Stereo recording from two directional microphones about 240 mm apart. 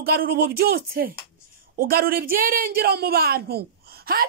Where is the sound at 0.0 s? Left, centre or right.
Right.